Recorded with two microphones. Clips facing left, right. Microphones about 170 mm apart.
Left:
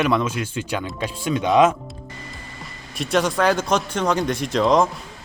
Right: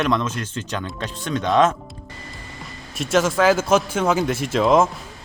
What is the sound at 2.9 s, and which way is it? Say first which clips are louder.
Speech: right 2 dB; centre (ahead or behind).